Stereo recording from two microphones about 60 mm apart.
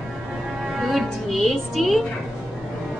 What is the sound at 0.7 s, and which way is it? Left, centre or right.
Music, centre.